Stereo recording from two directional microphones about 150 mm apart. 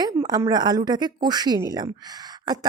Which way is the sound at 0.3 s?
30° right (ahead or behind).